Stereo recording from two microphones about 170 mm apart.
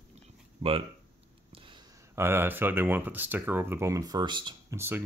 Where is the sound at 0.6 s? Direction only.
35° right (ahead or behind).